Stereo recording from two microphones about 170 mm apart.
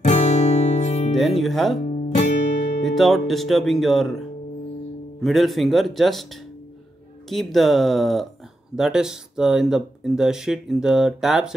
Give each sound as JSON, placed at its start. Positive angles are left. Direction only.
{"t": 0.0, "sound": "music", "side_deg": 40}
{"t": 1.1, "sound": "speech", "side_deg": 0}
{"t": 1.9, "sound": "guitar", "side_deg": 45}
{"t": 2.8, "sound": "speech", "side_deg": 0}
{"t": 5.2, "sound": "speech", "side_deg": 0}
{"t": 7.2, "sound": "speech", "side_deg": 0}